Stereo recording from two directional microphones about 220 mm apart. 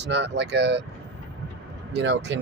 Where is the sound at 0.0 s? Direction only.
50° right (ahead or behind).